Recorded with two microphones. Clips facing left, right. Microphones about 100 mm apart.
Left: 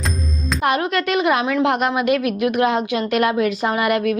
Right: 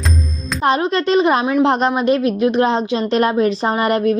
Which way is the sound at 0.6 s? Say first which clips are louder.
Right 4 dB; 30° right (ahead or behind).